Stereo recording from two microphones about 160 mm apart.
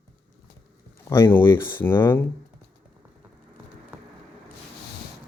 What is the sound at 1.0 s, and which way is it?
Speech, 15° left (ahead or behind).